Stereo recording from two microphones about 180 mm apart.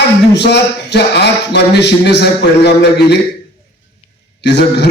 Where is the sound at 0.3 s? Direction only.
70° left (ahead or behind).